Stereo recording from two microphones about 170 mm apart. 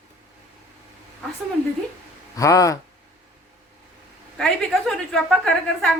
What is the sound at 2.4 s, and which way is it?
Speech, 20° left (ahead or behind).